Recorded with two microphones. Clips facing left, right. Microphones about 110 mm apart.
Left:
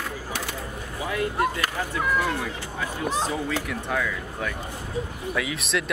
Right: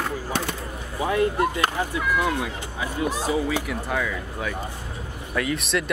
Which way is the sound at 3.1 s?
10° right (ahead or behind).